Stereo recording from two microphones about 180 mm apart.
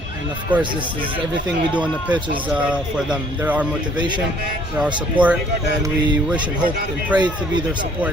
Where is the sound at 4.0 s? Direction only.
25° right (ahead or behind).